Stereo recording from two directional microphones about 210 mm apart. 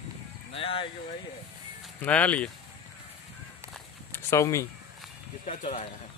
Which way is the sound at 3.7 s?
10° left (ahead or behind).